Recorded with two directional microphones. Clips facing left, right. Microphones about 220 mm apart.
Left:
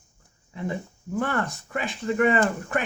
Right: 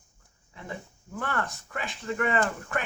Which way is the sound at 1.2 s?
20° left (ahead or behind).